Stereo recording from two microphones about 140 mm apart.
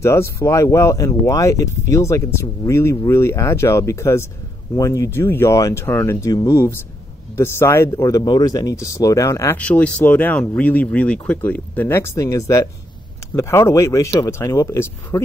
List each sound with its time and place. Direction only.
0.0 s speech: 20° left (ahead or behind)
9.6 s speech: 10° left (ahead or behind)